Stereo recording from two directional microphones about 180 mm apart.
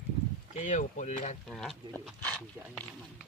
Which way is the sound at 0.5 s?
45° left (ahead or behind).